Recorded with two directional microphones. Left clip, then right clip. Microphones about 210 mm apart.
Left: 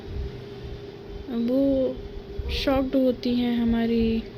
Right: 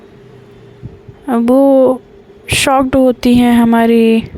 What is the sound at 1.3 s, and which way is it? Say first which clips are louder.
Speech: right 15 dB; 60° right (ahead or behind).